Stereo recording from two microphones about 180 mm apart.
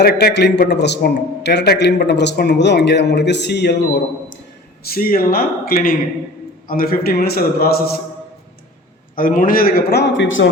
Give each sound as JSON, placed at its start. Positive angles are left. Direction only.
{"t": 0.0, "sound": "a man's voice", "side_deg": 60}
{"t": 4.8, "sound": "a man's voice", "side_deg": 55}
{"t": 9.1, "sound": "a man's voice", "side_deg": 50}